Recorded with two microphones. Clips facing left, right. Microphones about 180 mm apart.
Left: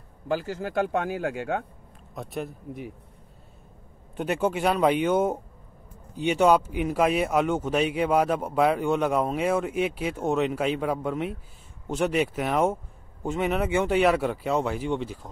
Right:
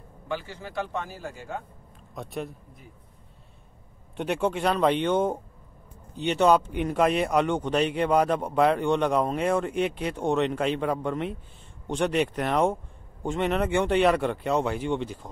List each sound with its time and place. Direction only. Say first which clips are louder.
0.3 s a man's voice: left 6 dB; 45° left (ahead or behind)
0.9 s speech: left 7 dB; 60° left (ahead or behind)
2.1 s speech: left 1 dB; centre (ahead or behind)
4.2 s speech: left 1 dB; 5° left (ahead or behind)